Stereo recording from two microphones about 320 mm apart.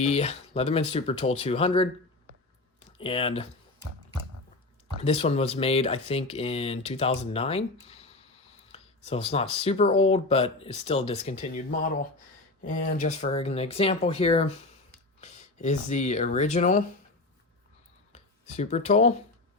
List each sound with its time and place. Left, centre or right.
0.0 s speech: centre
3.0 s speech: centre
5.0 s speech: centre
18.1 s speech: left